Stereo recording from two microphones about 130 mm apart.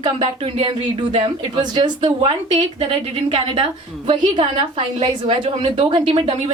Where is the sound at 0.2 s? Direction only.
50° right (ahead or behind).